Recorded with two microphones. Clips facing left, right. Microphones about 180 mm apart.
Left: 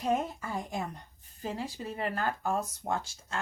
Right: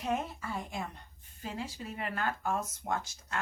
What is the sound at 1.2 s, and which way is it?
Speech, 35° left (ahead or behind).